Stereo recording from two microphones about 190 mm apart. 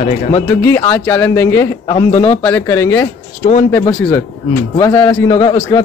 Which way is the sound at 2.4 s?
10° left (ahead or behind).